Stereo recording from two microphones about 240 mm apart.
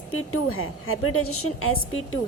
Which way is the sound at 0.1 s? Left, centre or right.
Left.